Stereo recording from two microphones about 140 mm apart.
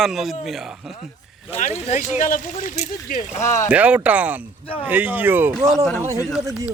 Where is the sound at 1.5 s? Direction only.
50° left (ahead or behind); by 3.2 s 75° left (ahead or behind).